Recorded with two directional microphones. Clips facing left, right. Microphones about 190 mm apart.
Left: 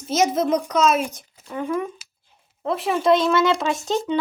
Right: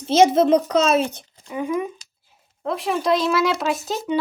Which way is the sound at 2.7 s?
Centre (ahead or behind).